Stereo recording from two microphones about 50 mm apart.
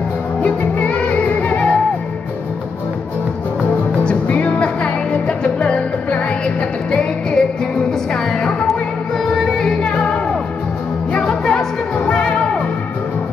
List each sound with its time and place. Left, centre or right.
0.4 s music: left
3.9 s music: left
11.1 s music: centre